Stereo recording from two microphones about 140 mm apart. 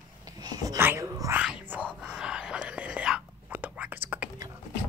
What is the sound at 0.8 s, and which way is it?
Speech, 20° right (ahead or behind).